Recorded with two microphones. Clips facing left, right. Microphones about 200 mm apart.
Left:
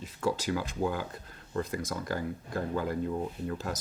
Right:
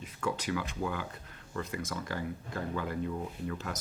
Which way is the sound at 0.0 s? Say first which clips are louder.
Left 4 dB; 30° left (ahead or behind).